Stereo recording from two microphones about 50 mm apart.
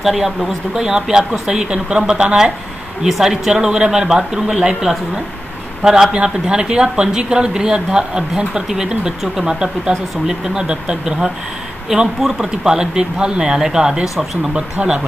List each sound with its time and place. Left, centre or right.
0.0 s speech: centre; by 15.0 s right